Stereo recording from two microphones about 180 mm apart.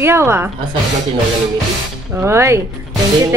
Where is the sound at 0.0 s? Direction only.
15° right (ahead or behind).